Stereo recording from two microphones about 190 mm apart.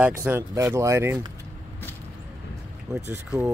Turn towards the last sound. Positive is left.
turn(degrees=-10)  # may be behind; listen again after turning